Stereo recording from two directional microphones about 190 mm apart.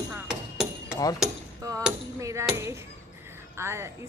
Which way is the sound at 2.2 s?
15° right (ahead or behind).